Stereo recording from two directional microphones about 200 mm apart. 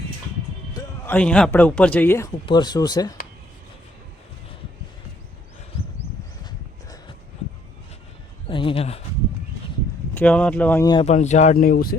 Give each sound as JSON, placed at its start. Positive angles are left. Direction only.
{"t": 0.7, "sound": "speech", "side_deg": 15}
{"t": 8.4, "sound": "a sound", "side_deg": 25}
{"t": 10.2, "sound": "speech", "side_deg": 5}
{"t": 11.0, "sound": "speech", "side_deg": 35}